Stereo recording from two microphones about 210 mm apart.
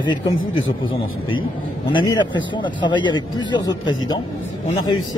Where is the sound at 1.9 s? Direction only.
20° left (ahead or behind).